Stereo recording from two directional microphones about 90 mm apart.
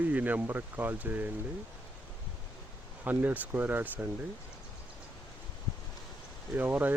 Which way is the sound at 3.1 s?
20° right (ahead or behind).